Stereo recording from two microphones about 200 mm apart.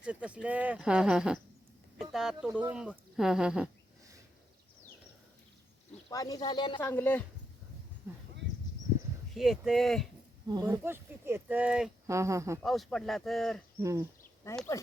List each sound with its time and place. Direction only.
0.0 s speech: 5° right (ahead or behind)
6.1 s speech: 20° left (ahead or behind)
6.7 s speech: 10° left (ahead or behind)
9.3 s speech: centre (ahead or behind)
10.5 s speech: 15° right (ahead or behind)
12.6 s speech: centre (ahead or behind)